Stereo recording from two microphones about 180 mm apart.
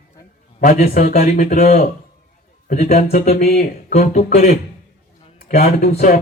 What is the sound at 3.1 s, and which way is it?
Speech, 55° left (ahead or behind).